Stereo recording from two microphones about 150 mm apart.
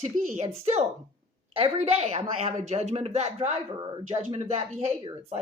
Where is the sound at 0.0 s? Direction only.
50° right (ahead or behind).